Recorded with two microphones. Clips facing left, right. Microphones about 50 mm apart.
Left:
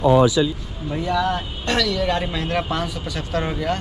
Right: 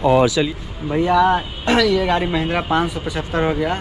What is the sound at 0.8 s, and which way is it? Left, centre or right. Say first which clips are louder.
A man's voice: right 7 dB; right.